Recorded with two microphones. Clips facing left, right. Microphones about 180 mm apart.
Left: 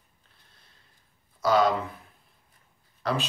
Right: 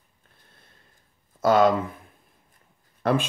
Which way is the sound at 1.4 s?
50° right (ahead or behind).